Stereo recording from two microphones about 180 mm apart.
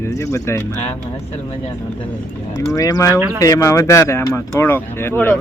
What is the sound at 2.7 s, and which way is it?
Speech, 20° left (ahead or behind).